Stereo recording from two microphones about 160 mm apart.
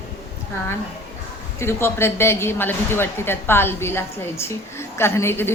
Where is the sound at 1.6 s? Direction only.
15° left (ahead or behind).